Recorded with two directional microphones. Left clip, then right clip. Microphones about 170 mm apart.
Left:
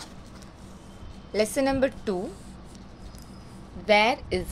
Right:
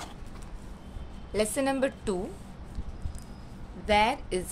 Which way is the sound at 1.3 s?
25° left (ahead or behind).